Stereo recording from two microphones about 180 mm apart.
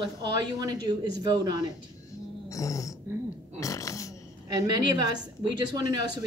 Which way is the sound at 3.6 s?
20° left (ahead or behind).